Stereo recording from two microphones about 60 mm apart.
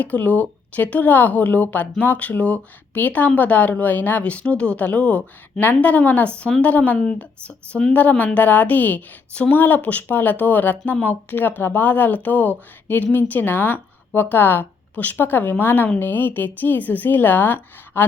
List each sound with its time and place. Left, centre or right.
0.0 s a woman's voice: left